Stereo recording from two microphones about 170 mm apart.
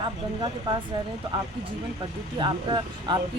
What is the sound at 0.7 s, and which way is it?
Speech, 30° right (ahead or behind).